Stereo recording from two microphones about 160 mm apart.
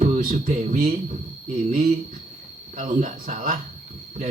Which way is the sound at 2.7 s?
55° right (ahead or behind).